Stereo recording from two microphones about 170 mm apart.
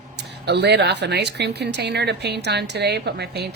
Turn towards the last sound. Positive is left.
turn(degrees=-75)  # may be behind; listen again after turning